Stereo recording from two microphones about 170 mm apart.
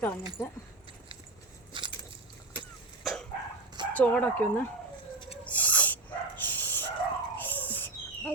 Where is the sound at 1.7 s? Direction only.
30° right (ahead or behind).